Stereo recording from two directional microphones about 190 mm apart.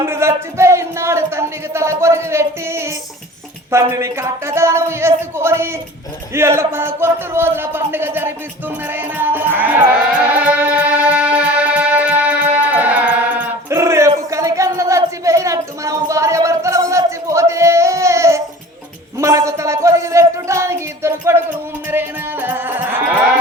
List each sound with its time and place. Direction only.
0.0 s speech: 15° right (ahead or behind)
10.3 s music: 5° right (ahead or behind)
14.1 s a sound: 15° right (ahead or behind)
21.8 s music: 10° right (ahead or behind)